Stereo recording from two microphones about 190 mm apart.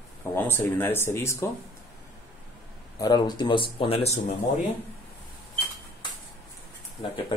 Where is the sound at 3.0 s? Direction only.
20° left (ahead or behind).